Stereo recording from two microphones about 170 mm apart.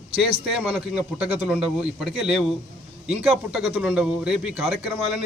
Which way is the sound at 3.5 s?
5° right (ahead or behind).